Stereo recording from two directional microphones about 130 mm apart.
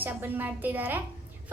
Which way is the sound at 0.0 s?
15° right (ahead or behind).